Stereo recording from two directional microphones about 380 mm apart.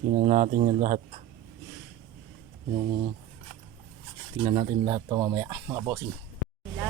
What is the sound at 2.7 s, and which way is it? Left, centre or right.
Speech, centre.